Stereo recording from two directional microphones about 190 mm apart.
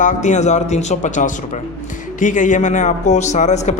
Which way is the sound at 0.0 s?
40° left (ahead or behind).